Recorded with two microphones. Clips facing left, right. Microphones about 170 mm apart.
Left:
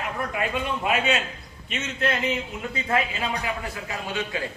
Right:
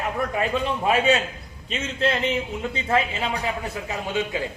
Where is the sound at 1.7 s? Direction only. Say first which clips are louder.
Right 3 dB; 30° right (ahead or behind).